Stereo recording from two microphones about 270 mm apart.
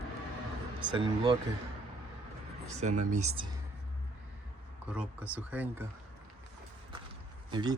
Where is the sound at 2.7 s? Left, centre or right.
Right.